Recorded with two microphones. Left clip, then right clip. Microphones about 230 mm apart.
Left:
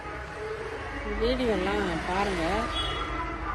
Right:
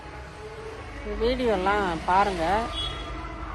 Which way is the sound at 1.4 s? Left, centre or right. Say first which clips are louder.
Right 4 dB; right.